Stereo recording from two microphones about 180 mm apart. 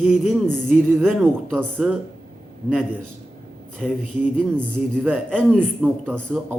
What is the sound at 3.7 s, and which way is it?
Speech, centre (ahead or behind).